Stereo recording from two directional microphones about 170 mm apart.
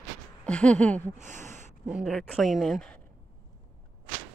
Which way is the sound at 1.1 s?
45° right (ahead or behind).